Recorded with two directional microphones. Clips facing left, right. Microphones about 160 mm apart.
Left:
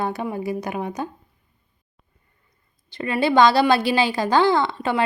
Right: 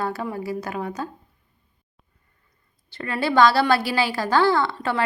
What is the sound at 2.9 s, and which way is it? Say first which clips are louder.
A woman's voice: left 4 dB; 15° left (ahead or behind).